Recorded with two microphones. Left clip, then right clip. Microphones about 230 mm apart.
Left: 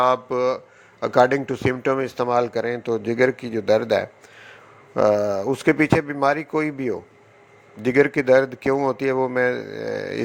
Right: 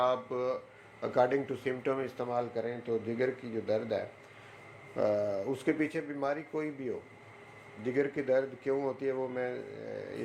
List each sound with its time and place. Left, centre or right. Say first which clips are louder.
0.0 s speech: left 11 dB; left